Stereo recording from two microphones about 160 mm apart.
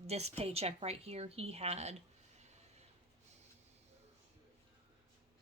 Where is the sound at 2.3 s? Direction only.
45° right (ahead or behind).